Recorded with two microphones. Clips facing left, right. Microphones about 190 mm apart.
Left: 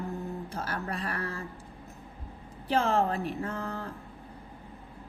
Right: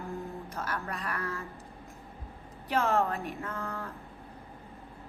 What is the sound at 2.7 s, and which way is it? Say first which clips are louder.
Speech: left 2 dB; 30° left (ahead or behind).